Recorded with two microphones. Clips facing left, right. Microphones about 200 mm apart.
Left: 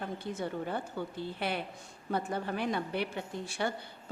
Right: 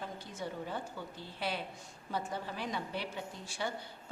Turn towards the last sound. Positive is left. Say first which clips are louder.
# left 5 dB
turn(degrees=60)  # may be behind; listen again after turning